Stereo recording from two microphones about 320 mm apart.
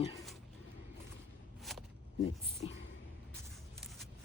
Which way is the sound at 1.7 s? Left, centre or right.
Centre.